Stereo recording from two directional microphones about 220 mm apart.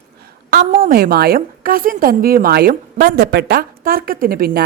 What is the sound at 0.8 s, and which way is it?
A woman's voice, 40° right (ahead or behind).